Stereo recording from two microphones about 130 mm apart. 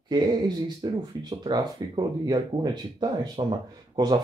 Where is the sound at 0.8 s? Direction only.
35° right (ahead or behind).